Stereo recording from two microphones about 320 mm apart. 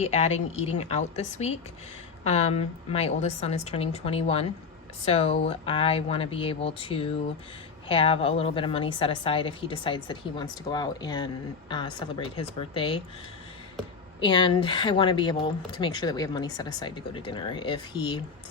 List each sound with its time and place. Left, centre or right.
0.0 s a woman's voice: centre
14.2 s speech: centre